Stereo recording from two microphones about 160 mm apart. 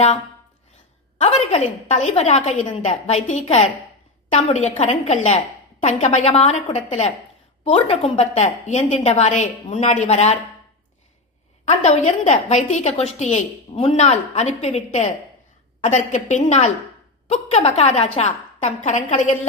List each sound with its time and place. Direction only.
1.2 s a woman's voice: 45° left (ahead or behind)
11.6 s a woman's voice: 45° left (ahead or behind)